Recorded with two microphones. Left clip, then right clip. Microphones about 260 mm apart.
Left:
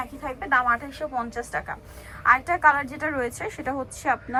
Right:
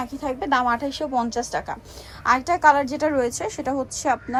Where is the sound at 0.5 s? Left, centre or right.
Centre.